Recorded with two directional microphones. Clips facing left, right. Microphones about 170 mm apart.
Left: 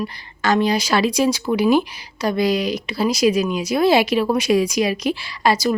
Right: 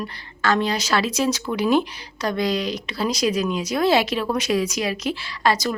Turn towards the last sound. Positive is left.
turn(degrees=10)  # may be behind; listen again after turning